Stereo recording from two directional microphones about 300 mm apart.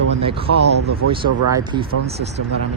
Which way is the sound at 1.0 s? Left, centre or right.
Right.